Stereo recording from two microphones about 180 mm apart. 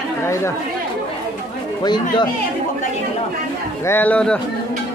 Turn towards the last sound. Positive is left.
turn(degrees=5)  # may be behind; listen again after turning